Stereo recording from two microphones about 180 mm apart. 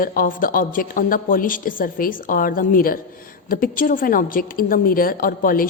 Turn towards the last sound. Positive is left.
turn(degrees=50)  # may be behind; listen again after turning